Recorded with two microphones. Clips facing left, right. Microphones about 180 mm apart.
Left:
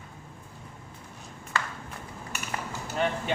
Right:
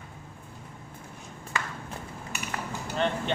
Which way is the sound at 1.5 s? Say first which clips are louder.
Left 1 dB; 15° right (ahead or behind).